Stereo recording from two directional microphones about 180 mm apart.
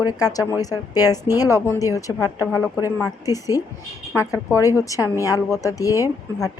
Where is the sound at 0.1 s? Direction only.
20° left (ahead or behind).